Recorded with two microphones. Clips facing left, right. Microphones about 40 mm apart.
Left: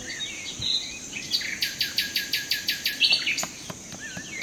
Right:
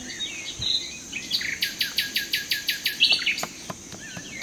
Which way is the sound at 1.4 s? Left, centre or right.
Centre.